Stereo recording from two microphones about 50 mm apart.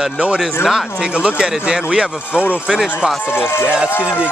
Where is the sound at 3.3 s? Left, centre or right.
Left.